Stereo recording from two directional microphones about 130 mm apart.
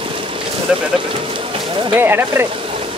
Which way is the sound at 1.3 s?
40° right (ahead or behind).